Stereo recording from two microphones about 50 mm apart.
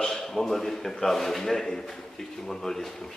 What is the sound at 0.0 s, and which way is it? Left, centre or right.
A man's voice, centre.